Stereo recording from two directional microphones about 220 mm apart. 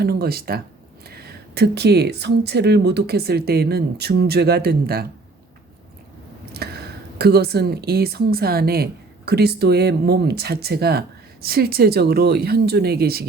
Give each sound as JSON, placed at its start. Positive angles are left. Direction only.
{"t": 0.0, "sound": "speech", "side_deg": -45}
{"t": 6.4, "sound": "speech", "side_deg": -45}